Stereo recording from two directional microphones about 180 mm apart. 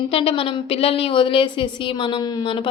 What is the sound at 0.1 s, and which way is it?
A woman's voice, 30° left (ahead or behind).